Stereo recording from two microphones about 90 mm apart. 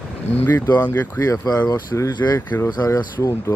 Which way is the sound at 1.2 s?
40° left (ahead or behind).